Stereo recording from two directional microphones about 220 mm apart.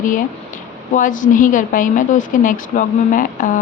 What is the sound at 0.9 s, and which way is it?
Speech, 35° left (ahead or behind).